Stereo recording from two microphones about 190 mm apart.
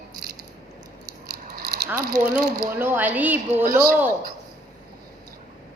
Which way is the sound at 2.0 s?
55° right (ahead or behind).